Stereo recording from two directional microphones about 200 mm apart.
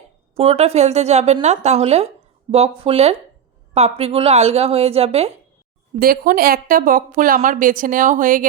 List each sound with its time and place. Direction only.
0.3 s a woman's voice: 30° right (ahead or behind)
6.0 s speech: 45° right (ahead or behind)